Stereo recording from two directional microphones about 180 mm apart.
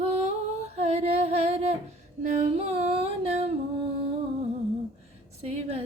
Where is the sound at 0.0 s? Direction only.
35° right (ahead or behind).